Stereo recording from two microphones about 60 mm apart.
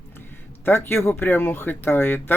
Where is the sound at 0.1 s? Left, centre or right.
Left.